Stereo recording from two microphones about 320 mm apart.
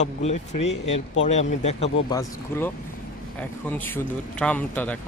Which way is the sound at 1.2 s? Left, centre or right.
Left.